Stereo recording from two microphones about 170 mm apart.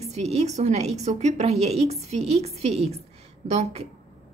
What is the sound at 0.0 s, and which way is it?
A woman's voice, 40° right (ahead or behind).